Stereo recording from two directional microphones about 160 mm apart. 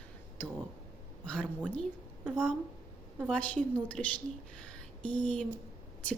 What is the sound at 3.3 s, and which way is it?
A woman's voice, 5° left (ahead or behind).